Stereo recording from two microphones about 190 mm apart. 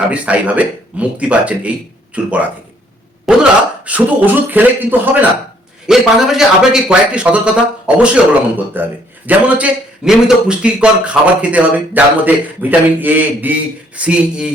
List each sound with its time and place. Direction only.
0.1 s a man's voice: 5° right (ahead or behind)